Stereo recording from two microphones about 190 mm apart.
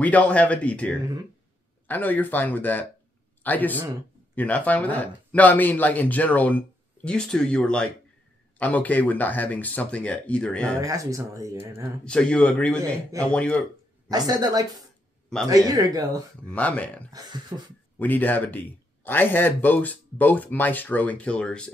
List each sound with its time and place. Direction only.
0.0 s speech: 10° left (ahead or behind)
3.7 s speech: 15° right (ahead or behind)
4.4 s speech: 10° left (ahead or behind)
10.8 s speech: 15° right (ahead or behind)
12.0 s speech: 5° left (ahead or behind)
14.0 s a woman's voice: 20° right (ahead or behind)
16.4 s speech: 5° left (ahead or behind)
17.5 s a woman's voice: 25° right (ahead or behind)
17.9 s speech: 10° left (ahead or behind)